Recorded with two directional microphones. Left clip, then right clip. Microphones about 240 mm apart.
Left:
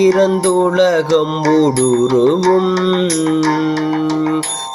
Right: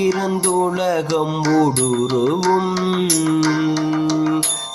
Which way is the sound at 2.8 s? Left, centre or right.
Centre.